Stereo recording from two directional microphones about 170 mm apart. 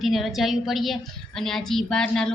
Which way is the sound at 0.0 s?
Centre (ahead or behind).